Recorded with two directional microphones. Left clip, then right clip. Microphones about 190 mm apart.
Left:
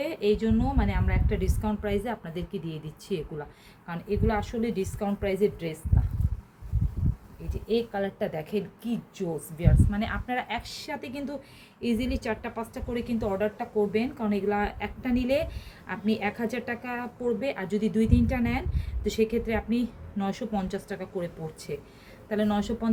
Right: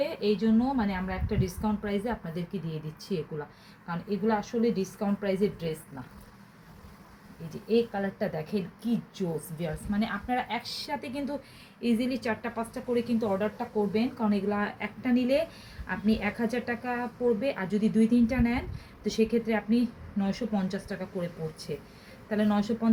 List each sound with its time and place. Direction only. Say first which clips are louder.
0.0 s a sound: left 2 dB; 15° left (ahead or behind)
0.4 s a woman's voice: right 1 dB; 20° left (ahead or behind)
7.5 s a woman's voice: right 1 dB; 25° left (ahead or behind)